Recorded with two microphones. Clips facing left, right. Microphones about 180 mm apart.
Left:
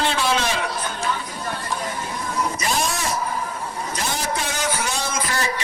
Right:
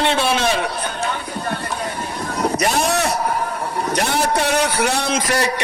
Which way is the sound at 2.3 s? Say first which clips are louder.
Right 6 dB; 70° right (ahead or behind).